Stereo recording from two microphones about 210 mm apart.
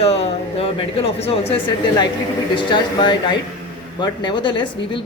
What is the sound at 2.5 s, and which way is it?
Speech, 25° left (ahead or behind).